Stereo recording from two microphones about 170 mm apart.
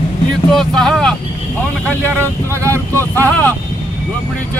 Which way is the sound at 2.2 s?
15° right (ahead or behind).